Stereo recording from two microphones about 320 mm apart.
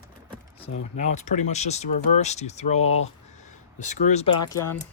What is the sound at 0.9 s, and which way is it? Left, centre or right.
Speech, left.